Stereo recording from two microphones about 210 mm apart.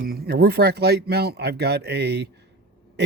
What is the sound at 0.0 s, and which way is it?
Speech, 45° right (ahead or behind).